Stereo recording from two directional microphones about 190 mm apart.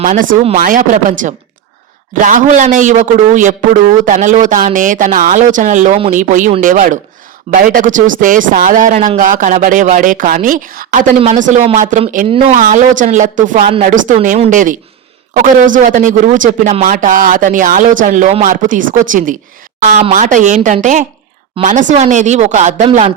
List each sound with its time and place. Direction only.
0.0 s a man's voice: 45° right (ahead or behind)